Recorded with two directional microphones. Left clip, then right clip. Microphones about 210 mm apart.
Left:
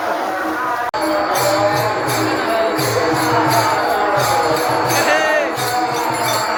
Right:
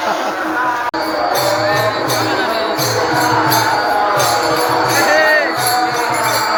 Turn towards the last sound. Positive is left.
turn(degrees=5)  # may be behind; listen again after turning